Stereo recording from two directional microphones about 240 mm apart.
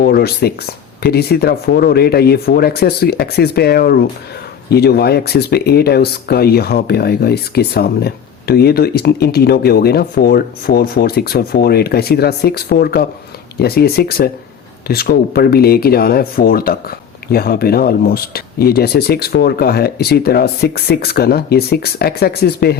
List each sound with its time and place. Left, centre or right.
0.0 s speech: left